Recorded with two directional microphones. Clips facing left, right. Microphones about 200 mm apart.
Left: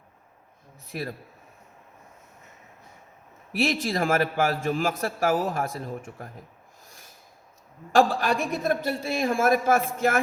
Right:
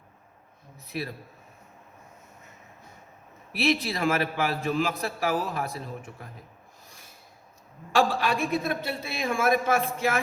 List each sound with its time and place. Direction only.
0.9 s a man's voice: 45° left (ahead or behind)
3.5 s a man's voice: 45° left (ahead or behind)
7.9 s a man's voice: 45° left (ahead or behind)